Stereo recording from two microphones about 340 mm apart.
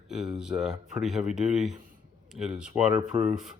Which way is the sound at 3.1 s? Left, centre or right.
Centre.